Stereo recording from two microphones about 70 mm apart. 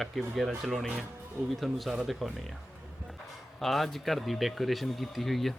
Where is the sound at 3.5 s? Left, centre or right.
Centre.